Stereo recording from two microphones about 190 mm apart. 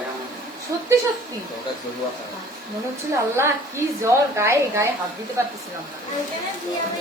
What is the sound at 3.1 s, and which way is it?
Speech, 15° right (ahead or behind).